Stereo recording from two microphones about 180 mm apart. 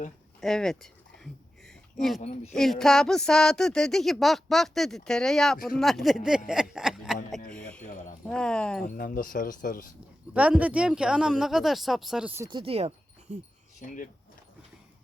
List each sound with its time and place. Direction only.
0.4 s a sound: 5° left (ahead or behind)
2.2 s speech: 40° left (ahead or behind)
2.5 s speech: 5° left (ahead or behind)
7.5 s a sound: 5° left (ahead or behind)
8.3 s speech: 5° left (ahead or behind)
9.0 s speech: 55° left (ahead or behind)
10.3 s speech: 5° right (ahead or behind)
12.5 s speech: 30° right (ahead or behind)
13.8 s speech: 45° left (ahead or behind)